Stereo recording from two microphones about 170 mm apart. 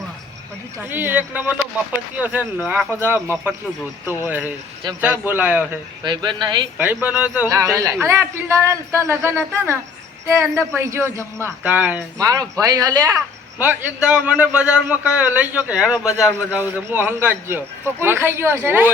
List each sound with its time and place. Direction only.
0.8 s a man's voice: 10° right (ahead or behind)
4.2 s a man's voice: 10° right (ahead or behind)
6.0 s speech: 25° right (ahead or behind)
6.7 s a man's voice: 10° right (ahead or behind)
13.6 s a man's voice: 10° right (ahead or behind)